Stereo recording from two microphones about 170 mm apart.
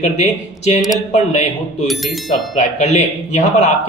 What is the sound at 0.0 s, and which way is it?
A man's voice, 40° left (ahead or behind).